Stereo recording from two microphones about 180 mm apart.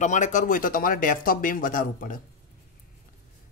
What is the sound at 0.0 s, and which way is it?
Speech, 45° left (ahead or behind).